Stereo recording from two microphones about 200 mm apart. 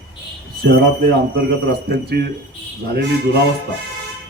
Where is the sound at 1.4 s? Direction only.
55° right (ahead or behind).